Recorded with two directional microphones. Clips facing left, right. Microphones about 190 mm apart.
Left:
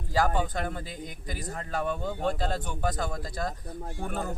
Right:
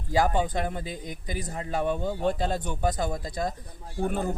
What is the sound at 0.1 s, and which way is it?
Speech, 15° right (ahead or behind).